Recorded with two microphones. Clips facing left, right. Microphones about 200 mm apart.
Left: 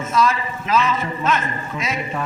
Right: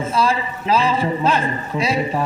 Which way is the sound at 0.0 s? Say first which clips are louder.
Even; 30° right (ahead or behind).